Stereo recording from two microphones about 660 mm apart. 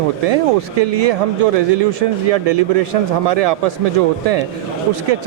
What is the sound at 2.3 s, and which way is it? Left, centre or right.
Speech, right.